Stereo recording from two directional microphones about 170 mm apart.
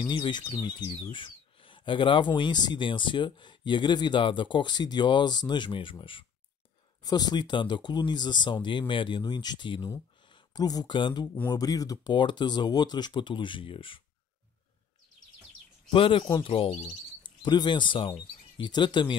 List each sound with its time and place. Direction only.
0.0 s speech: 25° left (ahead or behind)
15.9 s speech: 30° left (ahead or behind)